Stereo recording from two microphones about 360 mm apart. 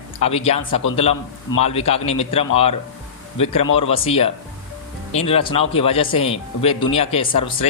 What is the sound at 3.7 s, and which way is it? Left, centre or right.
Speech, centre.